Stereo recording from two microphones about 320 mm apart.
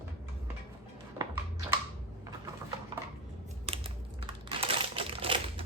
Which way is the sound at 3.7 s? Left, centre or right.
Centre.